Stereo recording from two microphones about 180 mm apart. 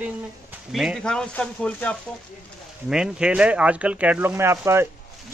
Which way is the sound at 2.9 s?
5° right (ahead or behind).